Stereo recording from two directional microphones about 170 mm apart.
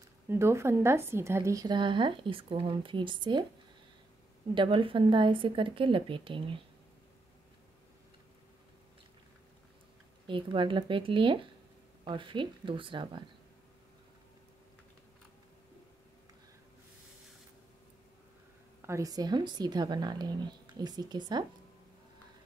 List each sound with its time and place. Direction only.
0.3 s a woman's voice: 15° right (ahead or behind)
4.6 s a woman's voice: 30° right (ahead or behind)
10.2 s a woman's voice: 30° right (ahead or behind)
18.8 s a woman's voice: 15° right (ahead or behind)